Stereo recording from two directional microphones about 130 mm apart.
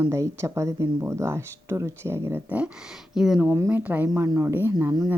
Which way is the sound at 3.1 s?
5° right (ahead or behind).